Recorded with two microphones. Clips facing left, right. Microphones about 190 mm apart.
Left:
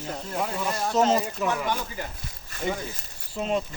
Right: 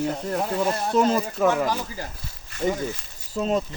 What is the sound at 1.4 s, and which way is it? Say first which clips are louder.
Speech: right 6 dB; 45° right (ahead or behind).